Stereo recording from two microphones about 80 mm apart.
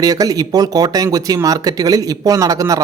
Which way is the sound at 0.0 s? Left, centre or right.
Right.